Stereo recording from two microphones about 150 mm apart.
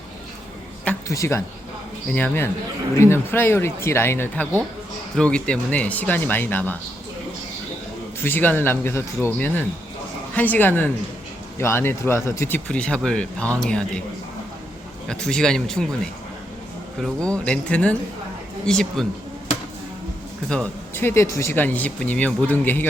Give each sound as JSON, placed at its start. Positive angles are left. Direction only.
{"t": 1.0, "sound": "speech", "side_deg": 20}
{"t": 8.2, "sound": "speech", "side_deg": 15}
{"t": 15.0, "sound": "speech", "side_deg": 5}
{"t": 17.0, "sound": "speech", "side_deg": 5}
{"t": 20.9, "sound": "speech", "side_deg": 15}